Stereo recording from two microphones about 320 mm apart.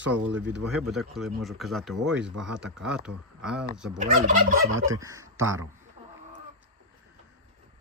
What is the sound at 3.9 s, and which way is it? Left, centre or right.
Fowl, right.